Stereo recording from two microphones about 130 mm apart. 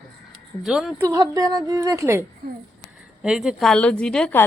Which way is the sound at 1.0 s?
25° right (ahead or behind).